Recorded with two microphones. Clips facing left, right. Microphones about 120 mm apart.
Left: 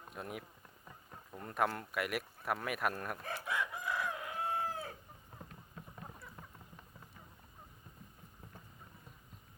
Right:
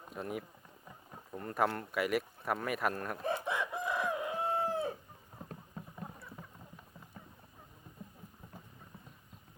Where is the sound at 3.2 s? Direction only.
20° right (ahead or behind).